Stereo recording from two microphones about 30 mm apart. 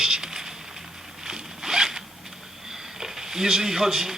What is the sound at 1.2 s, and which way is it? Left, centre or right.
Zipper, centre.